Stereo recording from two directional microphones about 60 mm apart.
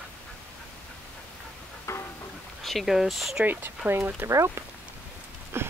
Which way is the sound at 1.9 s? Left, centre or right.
Left.